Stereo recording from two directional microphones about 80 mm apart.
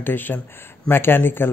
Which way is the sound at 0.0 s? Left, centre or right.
Left.